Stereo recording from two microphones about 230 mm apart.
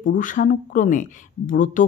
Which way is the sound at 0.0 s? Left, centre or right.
Left.